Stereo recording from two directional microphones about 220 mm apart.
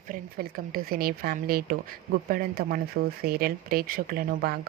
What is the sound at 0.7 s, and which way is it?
Speech, 40° right (ahead or behind).